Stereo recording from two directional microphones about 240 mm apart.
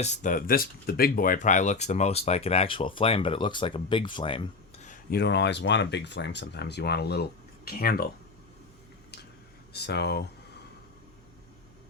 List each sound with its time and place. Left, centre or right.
0.0 s speech: left
9.7 s speech: left